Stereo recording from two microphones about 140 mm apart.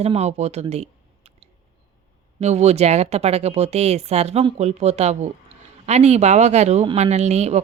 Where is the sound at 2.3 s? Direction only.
50° right (ahead or behind).